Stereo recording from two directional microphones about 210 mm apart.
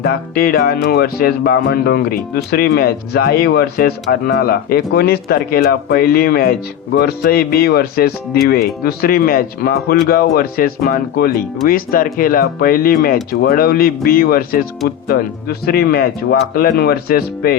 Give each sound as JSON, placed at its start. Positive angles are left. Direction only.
{"t": 0.0, "sound": "speech", "side_deg": 45}